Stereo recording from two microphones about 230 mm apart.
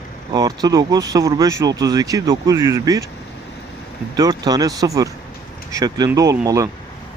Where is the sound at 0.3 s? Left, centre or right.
Centre.